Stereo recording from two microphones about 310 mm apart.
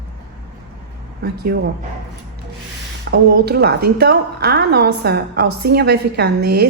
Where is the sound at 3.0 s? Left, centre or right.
Right.